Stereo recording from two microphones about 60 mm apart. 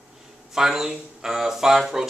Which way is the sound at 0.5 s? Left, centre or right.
Centre.